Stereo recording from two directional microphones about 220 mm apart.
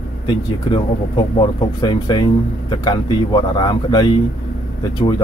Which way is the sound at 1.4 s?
20° left (ahead or behind).